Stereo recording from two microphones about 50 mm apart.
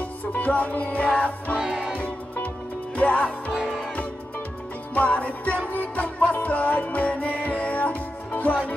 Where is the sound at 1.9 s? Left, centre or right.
Left.